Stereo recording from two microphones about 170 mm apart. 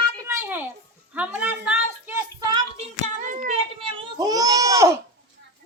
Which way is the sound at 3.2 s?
50° right (ahead or behind).